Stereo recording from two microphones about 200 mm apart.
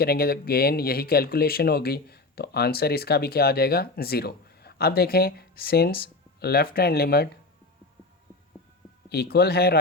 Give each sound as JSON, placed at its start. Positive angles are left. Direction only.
{"t": 0.0, "sound": "speech", "side_deg": 50}
{"t": 9.0, "sound": "speech", "side_deg": 55}